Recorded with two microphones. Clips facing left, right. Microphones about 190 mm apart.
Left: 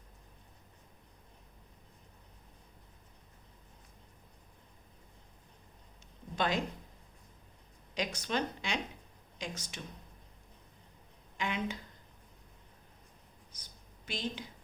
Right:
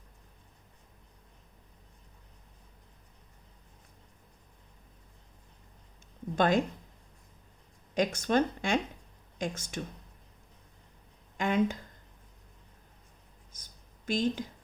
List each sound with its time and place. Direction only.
6.3 s speech: 50° right (ahead or behind)
7.9 s speech: 50° right (ahead or behind)
11.3 s speech: 45° right (ahead or behind)
13.5 s a sound: 45° right (ahead or behind)